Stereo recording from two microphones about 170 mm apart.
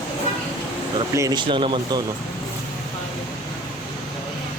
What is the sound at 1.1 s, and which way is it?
Speech, 20° right (ahead or behind).